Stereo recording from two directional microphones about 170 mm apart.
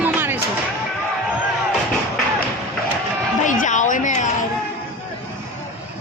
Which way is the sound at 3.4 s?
50° left (ahead or behind).